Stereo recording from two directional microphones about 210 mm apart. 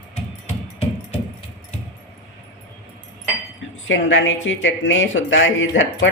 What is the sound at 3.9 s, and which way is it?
A woman's voice, 65° left (ahead or behind).